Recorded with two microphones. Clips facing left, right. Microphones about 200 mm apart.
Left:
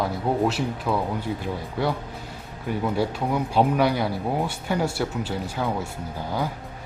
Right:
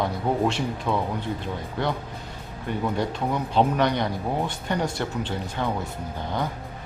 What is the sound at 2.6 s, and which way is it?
Speech, 5° left (ahead or behind).